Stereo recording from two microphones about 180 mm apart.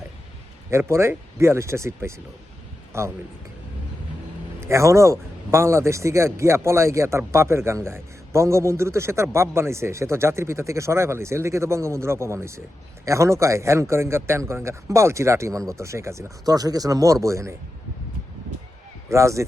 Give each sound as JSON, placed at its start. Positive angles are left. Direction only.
{"t": 0.7, "sound": "speech", "side_deg": -15}
{"t": 4.6, "sound": "speech", "side_deg": -15}
{"t": 19.0, "sound": "speech", "side_deg": -15}